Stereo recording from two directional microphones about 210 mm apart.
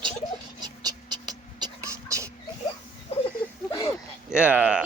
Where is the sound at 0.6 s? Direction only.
20° right (ahead or behind).